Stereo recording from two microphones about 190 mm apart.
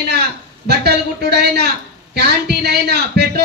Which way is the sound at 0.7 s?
60° right (ahead or behind).